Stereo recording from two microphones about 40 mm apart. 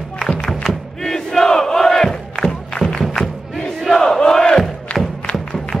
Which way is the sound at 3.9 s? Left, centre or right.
Centre.